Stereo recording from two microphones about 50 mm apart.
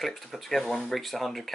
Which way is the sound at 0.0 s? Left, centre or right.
Centre.